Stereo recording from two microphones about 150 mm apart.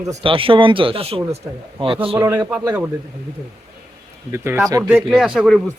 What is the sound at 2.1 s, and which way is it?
Speech, 10° right (ahead or behind).